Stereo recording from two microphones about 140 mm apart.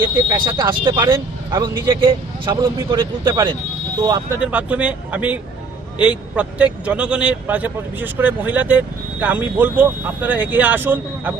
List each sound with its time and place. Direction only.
0.3 s speech: 30° right (ahead or behind)
4.4 s a man's voice: 10° right (ahead or behind)